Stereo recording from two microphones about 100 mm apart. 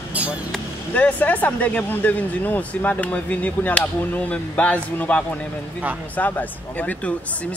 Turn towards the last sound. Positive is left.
turn(degrees=15)  # may be behind; listen again after turning